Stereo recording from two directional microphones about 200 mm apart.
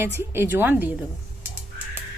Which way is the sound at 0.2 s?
10° right (ahead or behind).